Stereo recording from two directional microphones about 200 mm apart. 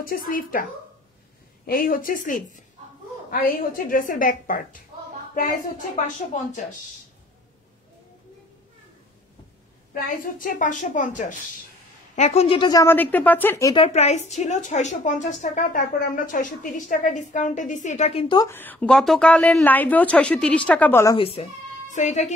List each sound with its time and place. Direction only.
0.0 s a woman's voice: 45° left (ahead or behind)
1.7 s a woman's voice: 45° left (ahead or behind)
5.9 s a woman's voice: 40° left (ahead or behind)
9.9 s a woman's voice: 45° left (ahead or behind); by 13.8 s 15° left (ahead or behind)
13.8 s a woman's voice: 30° left (ahead or behind)
18.3 s a woman's voice: 15° left (ahead or behind)
21.2 s a woman's voice: 30° left (ahead or behind)